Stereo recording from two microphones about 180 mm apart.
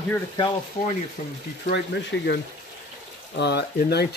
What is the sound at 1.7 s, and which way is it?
Speech, 65° left (ahead or behind).